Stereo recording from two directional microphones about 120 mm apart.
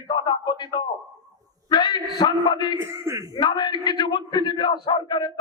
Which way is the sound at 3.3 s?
35° left (ahead or behind).